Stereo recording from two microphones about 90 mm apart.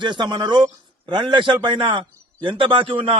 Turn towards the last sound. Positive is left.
turn(degrees=-75)  # may be behind; listen again after turning